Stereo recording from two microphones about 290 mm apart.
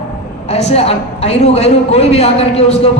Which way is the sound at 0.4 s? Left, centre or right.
Left.